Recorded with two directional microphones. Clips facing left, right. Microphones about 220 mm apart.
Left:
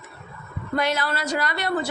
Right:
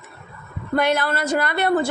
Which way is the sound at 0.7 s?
55° right (ahead or behind).